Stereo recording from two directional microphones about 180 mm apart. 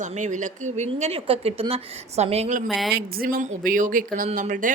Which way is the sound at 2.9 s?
60° right (ahead or behind).